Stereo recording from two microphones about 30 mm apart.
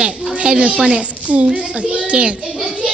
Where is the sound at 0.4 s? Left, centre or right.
Right.